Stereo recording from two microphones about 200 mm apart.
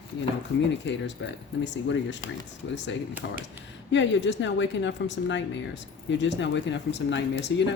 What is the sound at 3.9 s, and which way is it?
Speech, 65° left (ahead or behind).